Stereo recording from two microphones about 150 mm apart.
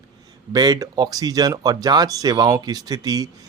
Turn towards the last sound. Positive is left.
turn(degrees=-25)  # may be behind; listen again after turning